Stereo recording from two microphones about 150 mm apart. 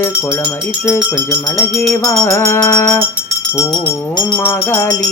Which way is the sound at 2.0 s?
20° left (ahead or behind).